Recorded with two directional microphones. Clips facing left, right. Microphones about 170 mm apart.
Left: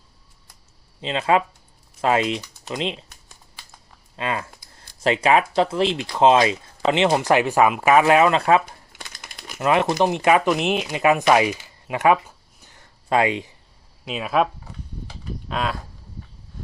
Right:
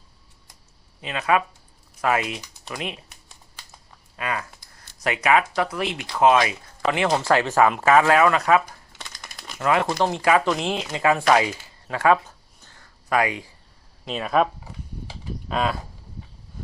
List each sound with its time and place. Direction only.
1.0 s speech: 25° left (ahead or behind)
4.2 s speech: 25° left (ahead or behind)
8.9 s a sound: 5° left (ahead or behind)
9.6 s speech: 20° left (ahead or behind)
12.6 s a sound: 20° left (ahead or behind)
14.0 s speech: 5° left (ahead or behind)